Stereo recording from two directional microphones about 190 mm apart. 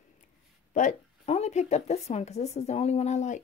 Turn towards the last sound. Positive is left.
turn(degrees=40)  # may be behind; listen again after turning